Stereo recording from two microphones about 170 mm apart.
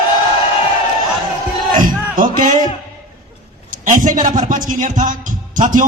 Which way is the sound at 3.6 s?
50° right (ahead or behind).